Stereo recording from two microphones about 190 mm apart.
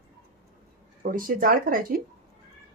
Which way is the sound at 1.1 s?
50° right (ahead or behind).